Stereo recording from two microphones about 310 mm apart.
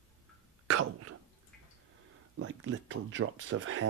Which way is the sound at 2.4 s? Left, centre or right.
Right.